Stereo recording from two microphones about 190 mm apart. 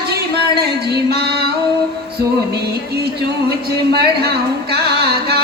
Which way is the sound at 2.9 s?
60° right (ahead or behind).